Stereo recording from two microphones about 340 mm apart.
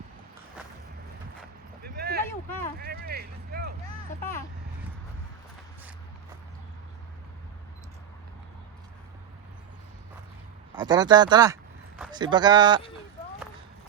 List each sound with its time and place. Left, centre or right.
1.8 s a sound: right
2.7 s speech: right
4.2 s speech: centre
10.8 s speech: centre